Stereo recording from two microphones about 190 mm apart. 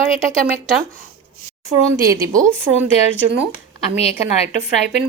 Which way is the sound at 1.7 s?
15° right (ahead or behind).